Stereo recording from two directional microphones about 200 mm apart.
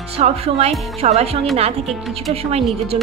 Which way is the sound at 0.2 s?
30° right (ahead or behind).